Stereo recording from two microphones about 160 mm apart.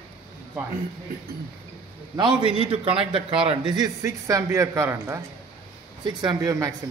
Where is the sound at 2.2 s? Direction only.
30° right (ahead or behind).